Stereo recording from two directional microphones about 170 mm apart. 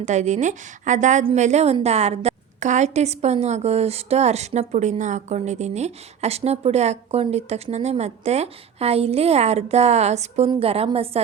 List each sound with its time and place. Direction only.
0.0 s a woman's voice: 45° right (ahead or behind)